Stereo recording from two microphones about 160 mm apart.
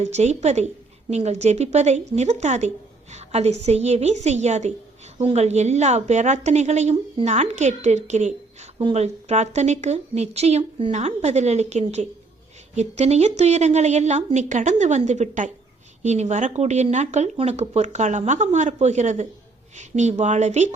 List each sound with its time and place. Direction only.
0.0 s speech: 45° right (ahead or behind)